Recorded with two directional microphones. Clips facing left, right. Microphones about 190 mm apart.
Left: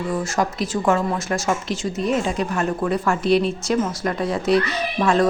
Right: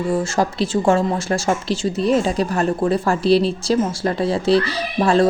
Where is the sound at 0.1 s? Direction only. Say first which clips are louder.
Right 3 dB; 30° right (ahead or behind).